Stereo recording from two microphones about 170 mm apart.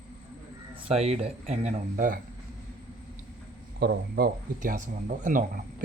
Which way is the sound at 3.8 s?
70° right (ahead or behind).